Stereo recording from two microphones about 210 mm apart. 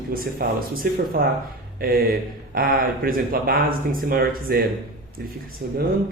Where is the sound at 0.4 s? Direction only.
45° right (ahead or behind).